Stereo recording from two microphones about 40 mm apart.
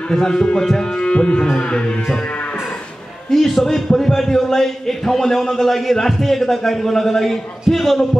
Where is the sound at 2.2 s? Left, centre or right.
Left.